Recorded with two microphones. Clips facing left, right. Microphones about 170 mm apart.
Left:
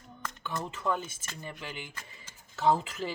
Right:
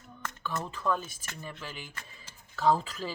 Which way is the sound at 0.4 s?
20° left (ahead or behind).